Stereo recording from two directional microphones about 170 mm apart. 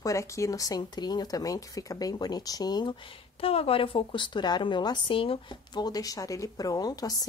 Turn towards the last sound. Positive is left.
turn(degrees=20)  # may be behind; listen again after turning